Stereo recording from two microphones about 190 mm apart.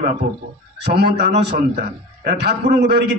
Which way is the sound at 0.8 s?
60° right (ahead or behind).